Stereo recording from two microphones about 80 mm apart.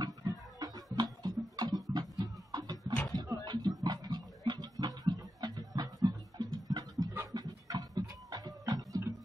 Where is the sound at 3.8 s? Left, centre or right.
Right.